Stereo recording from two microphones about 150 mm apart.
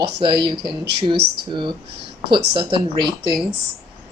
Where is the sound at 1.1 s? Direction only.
90° right.